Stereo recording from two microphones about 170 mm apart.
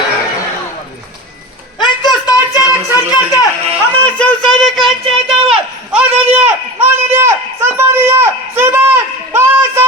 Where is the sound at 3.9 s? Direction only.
10° left (ahead or behind).